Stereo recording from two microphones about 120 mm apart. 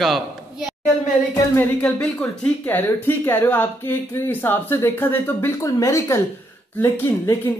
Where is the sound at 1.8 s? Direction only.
10° left (ahead or behind).